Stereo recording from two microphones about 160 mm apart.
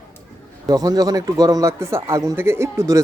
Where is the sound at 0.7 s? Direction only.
25° right (ahead or behind).